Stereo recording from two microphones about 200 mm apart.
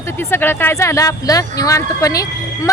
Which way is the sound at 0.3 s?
10° left (ahead or behind).